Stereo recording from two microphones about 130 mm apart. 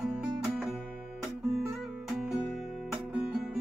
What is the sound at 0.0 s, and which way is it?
Music, 5° right (ahead or behind).